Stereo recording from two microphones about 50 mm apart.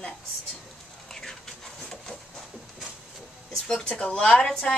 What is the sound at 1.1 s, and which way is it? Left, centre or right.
Printer, centre.